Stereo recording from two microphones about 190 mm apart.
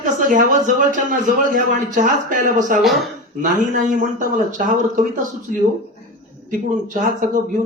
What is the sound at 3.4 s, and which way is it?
Speech, 45° right (ahead or behind).